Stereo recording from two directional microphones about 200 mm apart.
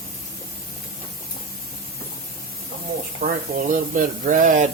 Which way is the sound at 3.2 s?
40° right (ahead or behind).